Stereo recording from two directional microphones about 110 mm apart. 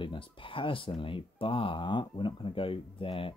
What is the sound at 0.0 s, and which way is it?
Speech, 50° left (ahead or behind).